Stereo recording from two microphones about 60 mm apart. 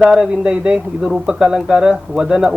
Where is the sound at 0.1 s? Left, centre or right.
Centre.